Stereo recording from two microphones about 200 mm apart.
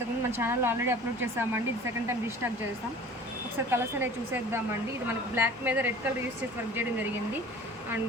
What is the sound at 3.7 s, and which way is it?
Speech, 10° right (ahead or behind).